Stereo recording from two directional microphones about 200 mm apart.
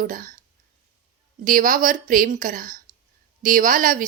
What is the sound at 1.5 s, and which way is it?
A woman's voice, 40° right (ahead or behind).